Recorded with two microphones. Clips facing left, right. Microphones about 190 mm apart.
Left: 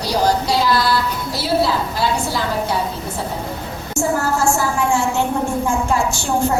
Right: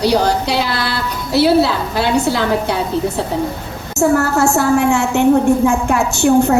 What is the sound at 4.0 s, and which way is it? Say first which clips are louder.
A woman's voice: right 6 dB; 65° right (ahead or behind).